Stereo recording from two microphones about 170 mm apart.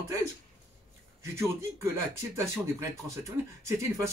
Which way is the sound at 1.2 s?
15° right (ahead or behind).